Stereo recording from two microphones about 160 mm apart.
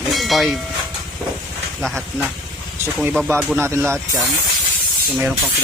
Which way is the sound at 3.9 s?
Centre (ahead or behind).